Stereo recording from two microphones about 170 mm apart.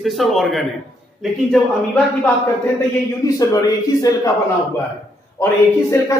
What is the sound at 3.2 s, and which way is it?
Speech, 20° left (ahead or behind).